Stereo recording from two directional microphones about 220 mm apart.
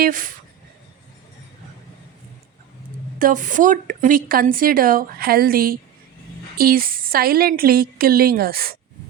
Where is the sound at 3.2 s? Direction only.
40° right (ahead or behind).